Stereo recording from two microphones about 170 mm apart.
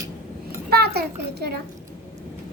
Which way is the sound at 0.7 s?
70° right (ahead or behind).